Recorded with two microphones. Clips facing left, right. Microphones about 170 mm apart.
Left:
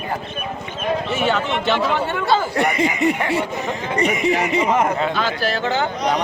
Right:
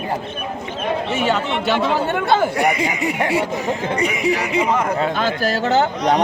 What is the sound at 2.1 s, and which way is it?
Speech, 50° right (ahead or behind).